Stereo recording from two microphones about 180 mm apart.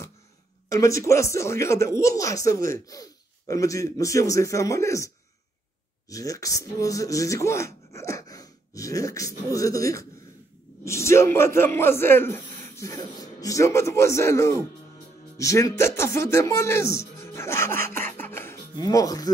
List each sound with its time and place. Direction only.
0.7 s speech: 15° left (ahead or behind)
17.2 s music: 15° left (ahead or behind)